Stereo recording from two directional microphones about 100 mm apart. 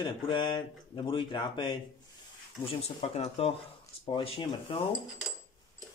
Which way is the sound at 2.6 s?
80° left.